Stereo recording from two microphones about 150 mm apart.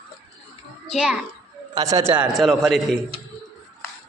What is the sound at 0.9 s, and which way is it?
Speech, 5° right (ahead or behind).